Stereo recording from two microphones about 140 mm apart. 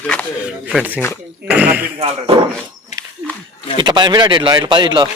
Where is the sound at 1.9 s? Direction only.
45° right (ahead or behind).